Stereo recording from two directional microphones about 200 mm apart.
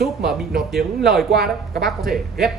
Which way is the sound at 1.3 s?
50° right (ahead or behind).